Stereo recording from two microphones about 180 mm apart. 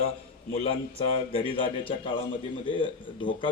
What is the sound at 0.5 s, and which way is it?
A man's voice, 35° left (ahead or behind).